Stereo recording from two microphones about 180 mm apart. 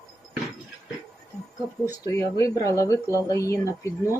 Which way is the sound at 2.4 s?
15° left (ahead or behind).